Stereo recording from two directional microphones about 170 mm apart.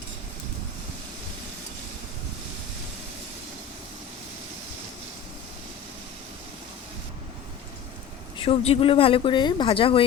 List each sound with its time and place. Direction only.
8.4 s speech: 35° left (ahead or behind)